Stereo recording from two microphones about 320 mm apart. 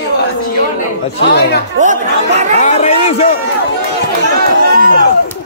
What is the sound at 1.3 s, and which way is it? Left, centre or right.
Speech, left.